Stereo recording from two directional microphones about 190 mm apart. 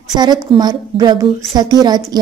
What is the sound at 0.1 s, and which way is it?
Speech, 20° right (ahead or behind).